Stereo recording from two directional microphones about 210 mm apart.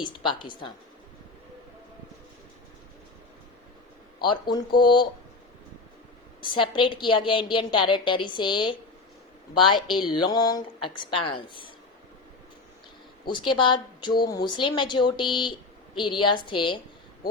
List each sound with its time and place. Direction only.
0.0 s a woman's voice: 20° left (ahead or behind)
4.3 s a woman's voice: 20° left (ahead or behind)
6.4 s a woman's voice: 25° left (ahead or behind)
10.1 s a woman's voice: 20° left (ahead or behind)
13.2 s a woman's voice: 20° left (ahead or behind)